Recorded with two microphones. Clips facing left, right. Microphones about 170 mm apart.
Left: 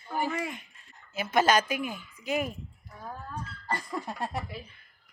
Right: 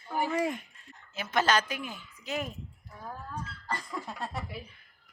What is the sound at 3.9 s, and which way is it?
Speech, 15° left (ahead or behind).